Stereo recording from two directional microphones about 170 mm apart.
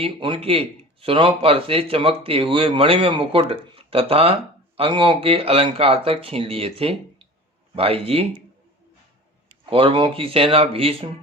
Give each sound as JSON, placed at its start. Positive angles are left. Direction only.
{"t": 0.0, "sound": "speech", "side_deg": -30}
{"t": 9.6, "sound": "speech", "side_deg": -30}